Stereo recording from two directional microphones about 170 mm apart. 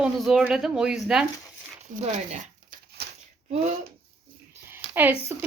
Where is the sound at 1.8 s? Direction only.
45° right (ahead or behind).